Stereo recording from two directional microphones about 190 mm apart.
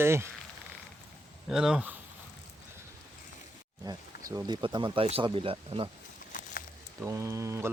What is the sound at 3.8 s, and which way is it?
Speech, 20° right (ahead or behind).